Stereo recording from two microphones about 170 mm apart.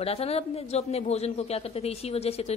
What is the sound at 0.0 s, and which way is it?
A woman's voice, 35° left (ahead or behind).